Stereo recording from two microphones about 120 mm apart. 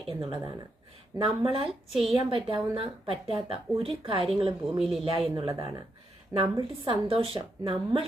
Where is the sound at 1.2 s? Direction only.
45° right (ahead or behind).